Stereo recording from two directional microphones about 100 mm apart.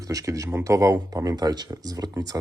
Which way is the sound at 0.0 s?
35° right (ahead or behind).